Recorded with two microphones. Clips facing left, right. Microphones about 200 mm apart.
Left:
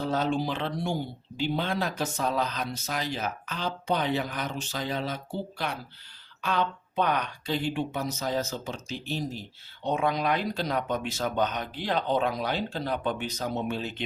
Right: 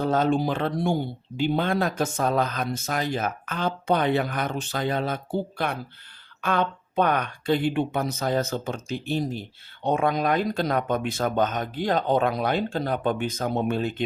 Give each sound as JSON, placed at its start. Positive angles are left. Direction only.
{"t": 0.0, "sound": "a woman's voice", "side_deg": -50}